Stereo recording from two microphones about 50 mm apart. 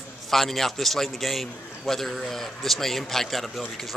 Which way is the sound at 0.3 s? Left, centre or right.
Centre.